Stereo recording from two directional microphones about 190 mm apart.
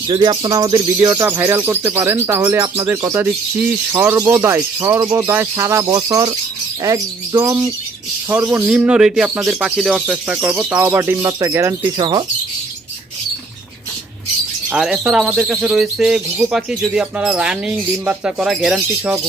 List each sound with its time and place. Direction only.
0.1 s speech: 25° right (ahead or behind)
14.7 s speech: 5° right (ahead or behind)